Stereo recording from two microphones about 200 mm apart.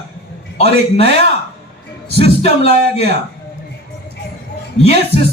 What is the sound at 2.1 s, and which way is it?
Speech, 30° left (ahead or behind).